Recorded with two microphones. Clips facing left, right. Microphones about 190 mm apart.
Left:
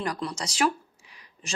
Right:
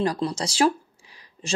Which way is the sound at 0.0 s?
30° right (ahead or behind).